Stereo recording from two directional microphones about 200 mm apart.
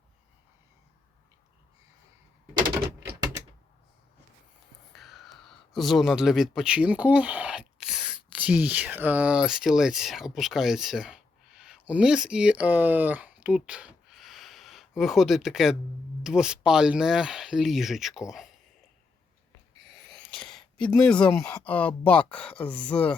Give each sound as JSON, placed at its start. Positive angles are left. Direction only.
{"t": 4.9, "sound": "speech", "side_deg": 0}
{"t": 20.1, "sound": "speech", "side_deg": 5}